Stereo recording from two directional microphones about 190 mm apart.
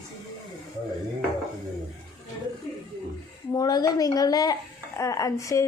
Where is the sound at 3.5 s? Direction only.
20° left (ahead or behind).